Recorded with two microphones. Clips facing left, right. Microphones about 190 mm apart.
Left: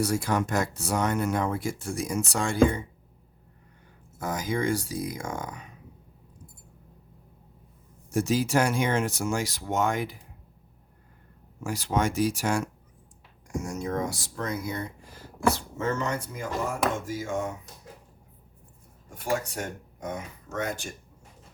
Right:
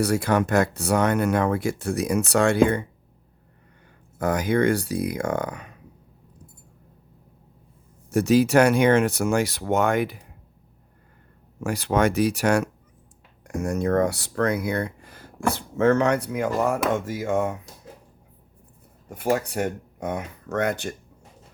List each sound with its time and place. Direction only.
0.0 s speech: 65° right (ahead or behind)
4.2 s speech: 65° right (ahead or behind)
8.1 s speech: 65° right (ahead or behind)
11.6 s speech: 65° right (ahead or behind)
19.1 s speech: 60° right (ahead or behind)